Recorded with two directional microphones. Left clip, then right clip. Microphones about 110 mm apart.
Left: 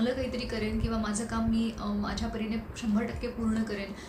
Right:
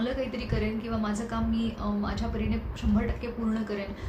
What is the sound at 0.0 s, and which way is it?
A woman's voice, 5° right (ahead or behind).